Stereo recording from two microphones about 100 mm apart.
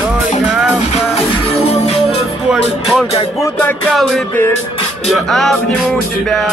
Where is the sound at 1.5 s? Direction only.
90° left.